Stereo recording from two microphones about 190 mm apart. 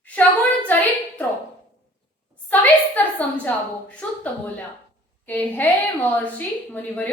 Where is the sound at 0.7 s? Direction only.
10° left (ahead or behind).